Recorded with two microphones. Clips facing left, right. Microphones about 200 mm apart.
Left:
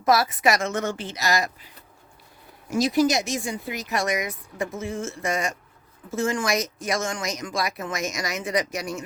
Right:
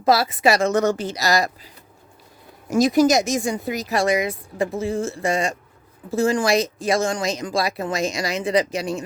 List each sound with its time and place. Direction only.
0.0 s speech: 30° right (ahead or behind)
2.6 s speech: 45° right (ahead or behind); by 9.0 s 30° right (ahead or behind)